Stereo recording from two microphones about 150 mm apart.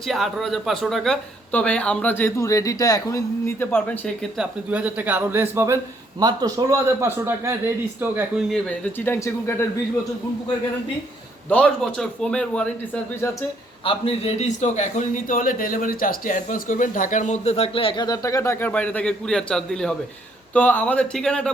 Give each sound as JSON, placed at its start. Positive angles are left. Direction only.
{"t": 0.1, "sound": "speech", "side_deg": 0}
{"t": 4.4, "sound": "a man's voice", "side_deg": -10}
{"t": 8.4, "sound": "speech", "side_deg": 5}
{"t": 11.4, "sound": "speech", "side_deg": 10}
{"t": 13.8, "sound": "a man's voice", "side_deg": 40}